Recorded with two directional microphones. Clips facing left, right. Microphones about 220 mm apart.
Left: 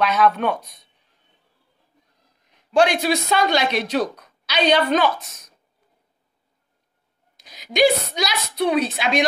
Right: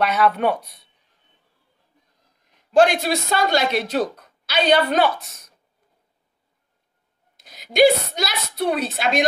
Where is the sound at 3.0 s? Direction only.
50° right (ahead or behind).